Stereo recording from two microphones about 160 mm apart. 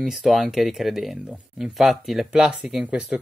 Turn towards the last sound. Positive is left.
turn(degrees=-5)  # may be behind; listen again after turning